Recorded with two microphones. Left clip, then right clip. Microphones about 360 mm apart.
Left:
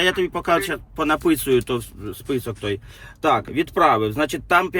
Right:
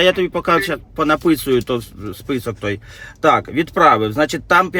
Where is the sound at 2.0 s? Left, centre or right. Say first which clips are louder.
Right 3 dB; right.